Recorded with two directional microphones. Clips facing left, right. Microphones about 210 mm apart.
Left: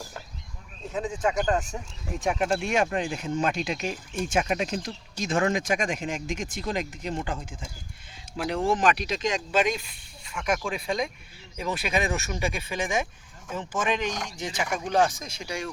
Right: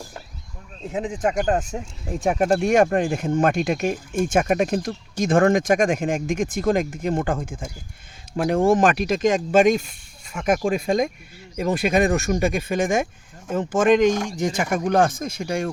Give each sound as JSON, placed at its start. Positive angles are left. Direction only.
{"t": 1.0, "sound": "speech", "side_deg": -20}
{"t": 2.2, "sound": "speech", "side_deg": -50}